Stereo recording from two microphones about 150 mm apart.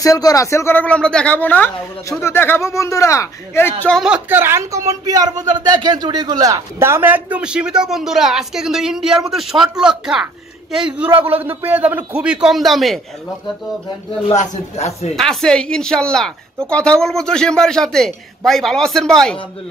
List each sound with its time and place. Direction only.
0.0 s speech: 25° left (ahead or behind)
3.8 s a man's voice: 5° left (ahead or behind)
4.1 s speech: 15° right (ahead or behind)
11.4 s speech: 10° right (ahead or behind)
14.3 s speech: 50° left (ahead or behind)
15.1 s a man's voice: 5° left (ahead or behind)